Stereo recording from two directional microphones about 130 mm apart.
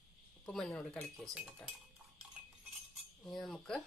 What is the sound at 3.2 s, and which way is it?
Speech, 5° left (ahead or behind).